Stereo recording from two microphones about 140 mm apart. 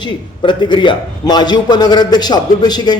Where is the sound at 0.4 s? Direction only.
35° left (ahead or behind).